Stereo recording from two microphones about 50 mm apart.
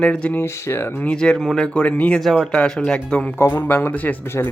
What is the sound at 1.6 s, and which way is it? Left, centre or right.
Speech, left.